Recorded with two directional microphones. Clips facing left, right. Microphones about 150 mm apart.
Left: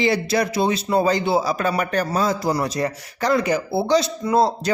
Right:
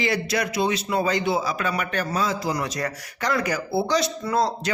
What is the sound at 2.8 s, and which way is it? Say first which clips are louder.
Speech: left 5 dB; 25° left (ahead or behind).